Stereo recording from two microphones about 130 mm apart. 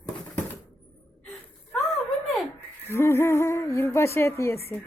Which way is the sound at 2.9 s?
20° left (ahead or behind).